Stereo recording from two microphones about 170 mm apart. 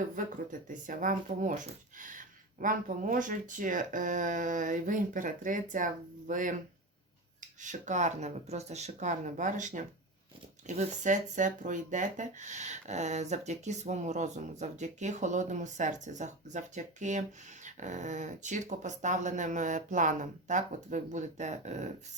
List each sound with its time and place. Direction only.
0.2 s speech: 50° right (ahead or behind)
7.6 s speech: 45° right (ahead or behind)